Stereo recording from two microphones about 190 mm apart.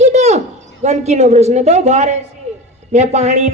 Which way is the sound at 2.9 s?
35° right (ahead or behind).